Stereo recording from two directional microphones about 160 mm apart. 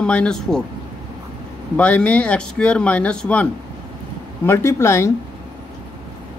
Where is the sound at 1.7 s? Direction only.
5° left (ahead or behind).